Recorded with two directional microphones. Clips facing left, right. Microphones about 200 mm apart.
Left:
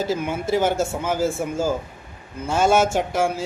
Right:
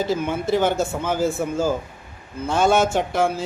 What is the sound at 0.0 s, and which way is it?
Speech, 10° left (ahead or behind).